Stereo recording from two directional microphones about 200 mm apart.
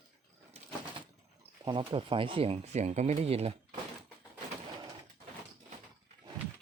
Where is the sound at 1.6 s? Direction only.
25° right (ahead or behind).